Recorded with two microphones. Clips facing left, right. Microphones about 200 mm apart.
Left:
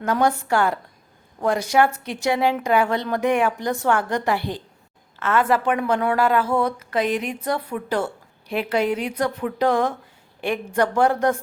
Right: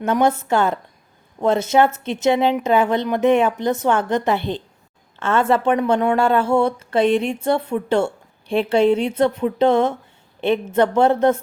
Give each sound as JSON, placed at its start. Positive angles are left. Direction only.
{"t": 0.0, "sound": "a woman's voice", "side_deg": -25}